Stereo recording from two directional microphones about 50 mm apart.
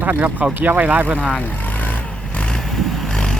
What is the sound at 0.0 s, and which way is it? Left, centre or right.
Speech, right.